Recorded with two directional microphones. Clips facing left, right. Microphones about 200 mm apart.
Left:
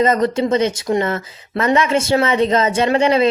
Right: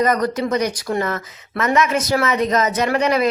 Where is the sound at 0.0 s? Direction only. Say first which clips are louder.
Left 3 dB; 25° left (ahead or behind).